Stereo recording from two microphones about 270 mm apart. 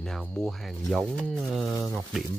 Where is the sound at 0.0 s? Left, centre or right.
Centre.